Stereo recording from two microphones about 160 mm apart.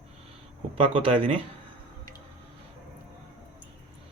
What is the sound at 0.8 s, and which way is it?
Speech, 35° right (ahead or behind).